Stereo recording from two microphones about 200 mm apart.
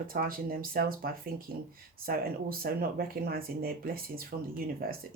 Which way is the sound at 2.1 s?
45° right (ahead or behind).